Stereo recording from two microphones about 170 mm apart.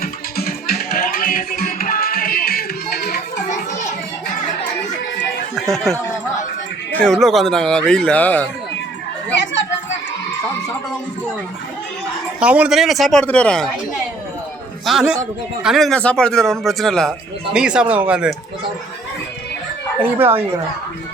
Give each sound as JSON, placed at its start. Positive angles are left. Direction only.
{"t": 0.0, "sound": "music", "side_deg": 65}
{"t": 5.5, "sound": "a man's voice", "side_deg": 0}
{"t": 9.3, "sound": "children playing", "side_deg": 90}
{"t": 12.4, "sound": "a man's voice", "side_deg": -5}
{"t": 14.8, "sound": "a man's voice", "side_deg": -5}
{"t": 20.0, "sound": "speech", "side_deg": -10}